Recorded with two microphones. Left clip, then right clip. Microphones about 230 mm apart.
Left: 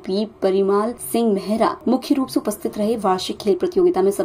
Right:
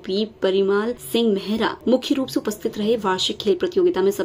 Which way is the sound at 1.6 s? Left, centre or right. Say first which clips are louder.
Right 1 dB; centre.